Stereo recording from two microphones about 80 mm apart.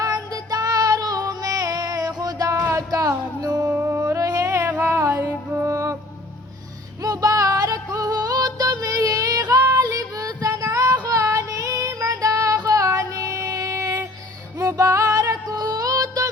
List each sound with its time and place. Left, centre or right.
0.0 s child singing: right
2.7 s music: right
3.7 s music: right
7.0 s music: right
11.0 s child singing: right
14.6 s music: right